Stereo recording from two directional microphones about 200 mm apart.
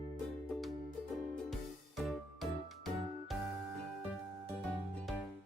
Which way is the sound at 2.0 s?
Centre (ahead or behind).